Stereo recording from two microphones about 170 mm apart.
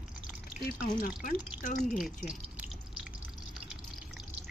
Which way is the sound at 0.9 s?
55° left (ahead or behind).